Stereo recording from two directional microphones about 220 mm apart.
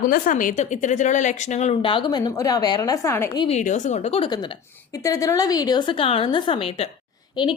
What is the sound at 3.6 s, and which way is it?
Speech, 35° left (ahead or behind).